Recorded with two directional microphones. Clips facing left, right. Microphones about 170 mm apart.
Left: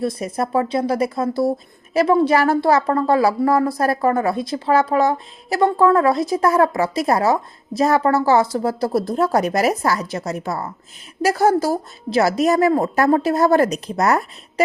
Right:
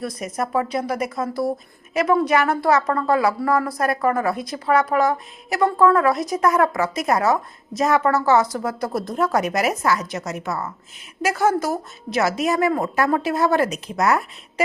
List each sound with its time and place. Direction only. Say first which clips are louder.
0.0 s a woman's voice: left 4 dB; 30° left (ahead or behind)